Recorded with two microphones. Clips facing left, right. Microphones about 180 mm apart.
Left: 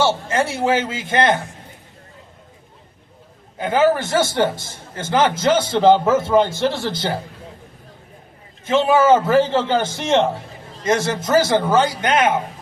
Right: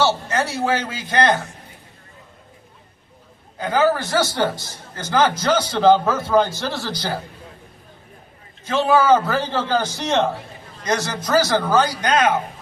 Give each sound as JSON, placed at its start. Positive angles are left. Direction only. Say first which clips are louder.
{"t": 0.0, "sound": "a man's voice", "louder": "left 1 dB", "side_deg": 25}
{"t": 3.6, "sound": "a man's voice", "louder": "left 2 dB", "side_deg": 25}
{"t": 8.6, "sound": "a man's voice", "louder": "left 2 dB", "side_deg": 25}